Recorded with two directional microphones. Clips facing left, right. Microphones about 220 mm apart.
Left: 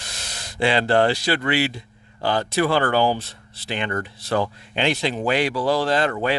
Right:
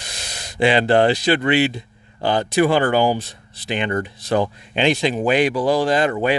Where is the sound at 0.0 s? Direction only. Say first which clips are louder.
Right 2 dB; 15° right (ahead or behind).